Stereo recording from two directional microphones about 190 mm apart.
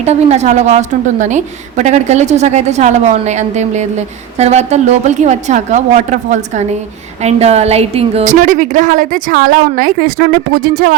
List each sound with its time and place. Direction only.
0.0 s a woman's voice: 35° right (ahead or behind)